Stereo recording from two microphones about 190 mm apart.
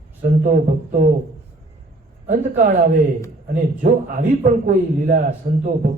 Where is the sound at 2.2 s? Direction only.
45° right (ahead or behind).